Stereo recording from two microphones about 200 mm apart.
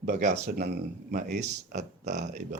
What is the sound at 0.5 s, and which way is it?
A man's voice, 50° right (ahead or behind).